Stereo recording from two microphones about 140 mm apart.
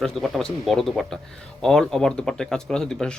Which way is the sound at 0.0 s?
Centre (ahead or behind).